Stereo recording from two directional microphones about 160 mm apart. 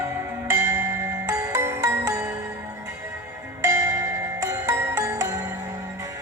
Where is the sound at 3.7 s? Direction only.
20° right (ahead or behind).